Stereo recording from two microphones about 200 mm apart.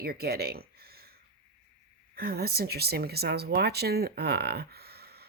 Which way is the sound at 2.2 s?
50° right (ahead or behind).